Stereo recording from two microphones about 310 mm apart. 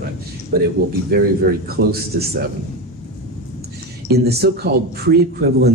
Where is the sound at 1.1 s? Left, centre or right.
Right.